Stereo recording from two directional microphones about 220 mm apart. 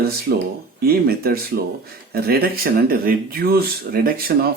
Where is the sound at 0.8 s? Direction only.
45° right (ahead or behind).